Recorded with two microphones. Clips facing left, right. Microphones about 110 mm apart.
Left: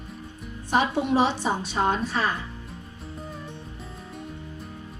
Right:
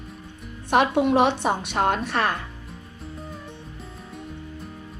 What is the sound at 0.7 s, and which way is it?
Speech, 60° right (ahead or behind).